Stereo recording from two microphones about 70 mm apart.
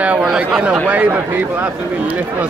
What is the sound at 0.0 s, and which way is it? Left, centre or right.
Speech, centre.